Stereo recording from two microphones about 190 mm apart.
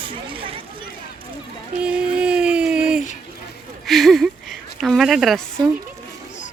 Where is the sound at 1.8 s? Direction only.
5° right (ahead or behind).